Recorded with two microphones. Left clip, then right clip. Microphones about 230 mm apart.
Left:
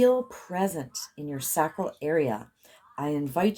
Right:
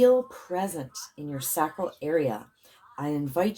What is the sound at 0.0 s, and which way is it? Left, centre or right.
Speech, left.